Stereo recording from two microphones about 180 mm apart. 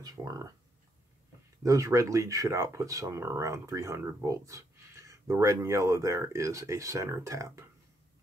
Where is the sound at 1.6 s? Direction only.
15° right (ahead or behind).